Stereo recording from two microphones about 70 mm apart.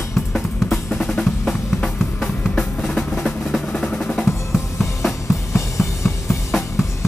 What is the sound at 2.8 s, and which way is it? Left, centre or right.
Drum, centre.